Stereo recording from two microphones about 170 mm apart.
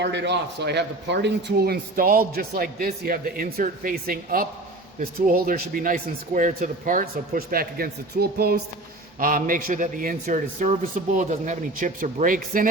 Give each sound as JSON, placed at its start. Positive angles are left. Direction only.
{"t": 0.0, "sound": "a man's voice", "side_deg": -90}
{"t": 9.1, "sound": "a man's voice", "side_deg": -55}